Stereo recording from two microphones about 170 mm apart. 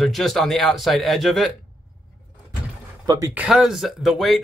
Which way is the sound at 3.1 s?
20° right (ahead or behind).